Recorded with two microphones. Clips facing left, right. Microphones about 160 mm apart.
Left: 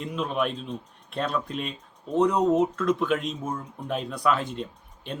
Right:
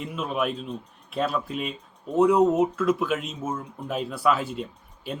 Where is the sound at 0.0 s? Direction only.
5° right (ahead or behind).